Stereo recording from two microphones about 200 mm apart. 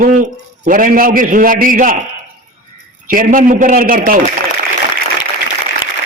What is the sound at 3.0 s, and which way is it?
A man's voice, 45° right (ahead or behind).